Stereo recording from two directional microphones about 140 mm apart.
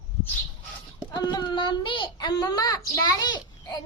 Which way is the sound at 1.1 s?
30° left (ahead or behind).